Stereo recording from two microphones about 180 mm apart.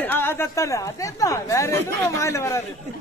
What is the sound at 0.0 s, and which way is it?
Speech, 10° left (ahead or behind).